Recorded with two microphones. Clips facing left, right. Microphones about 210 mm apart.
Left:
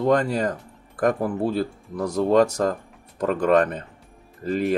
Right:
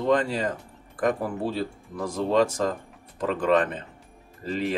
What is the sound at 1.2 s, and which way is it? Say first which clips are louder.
Speech: left 5 dB; 50° left (ahead or behind).